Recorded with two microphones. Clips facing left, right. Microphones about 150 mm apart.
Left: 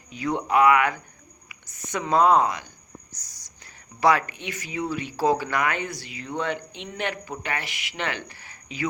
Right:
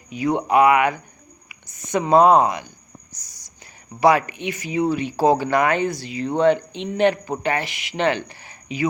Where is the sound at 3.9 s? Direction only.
15° right (ahead or behind).